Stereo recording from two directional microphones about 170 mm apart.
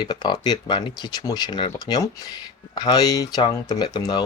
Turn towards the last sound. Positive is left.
turn(degrees=25)  # may be behind; listen again after turning